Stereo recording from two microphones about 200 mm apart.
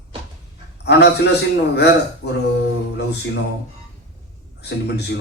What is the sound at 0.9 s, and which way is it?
Speech, 55° left (ahead or behind).